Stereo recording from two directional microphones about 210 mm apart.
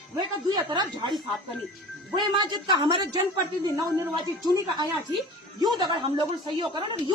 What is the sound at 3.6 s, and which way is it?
Speech, 20° right (ahead or behind).